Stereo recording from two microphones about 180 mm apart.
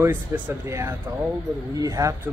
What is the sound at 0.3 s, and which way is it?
Speech, 15° right (ahead or behind).